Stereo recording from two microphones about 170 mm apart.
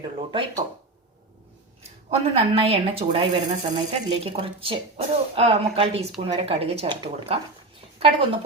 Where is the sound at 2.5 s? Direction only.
35° right (ahead or behind).